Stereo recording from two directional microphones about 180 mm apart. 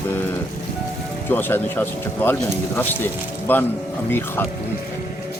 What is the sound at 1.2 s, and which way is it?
Speech, 10° left (ahead or behind).